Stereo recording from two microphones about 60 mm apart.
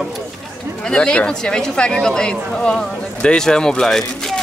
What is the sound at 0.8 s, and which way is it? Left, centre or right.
Speech, centre.